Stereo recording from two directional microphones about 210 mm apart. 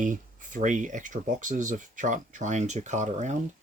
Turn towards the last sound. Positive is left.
turn(degrees=-35)  # may be behind; listen again after turning